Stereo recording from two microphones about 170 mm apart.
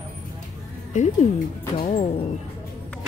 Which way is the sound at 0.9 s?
45° left (ahead or behind).